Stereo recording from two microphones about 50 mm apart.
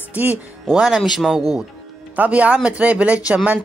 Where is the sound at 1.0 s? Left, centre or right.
Centre.